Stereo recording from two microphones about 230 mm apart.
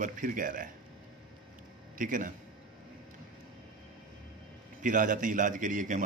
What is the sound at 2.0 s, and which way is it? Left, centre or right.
Speech, right.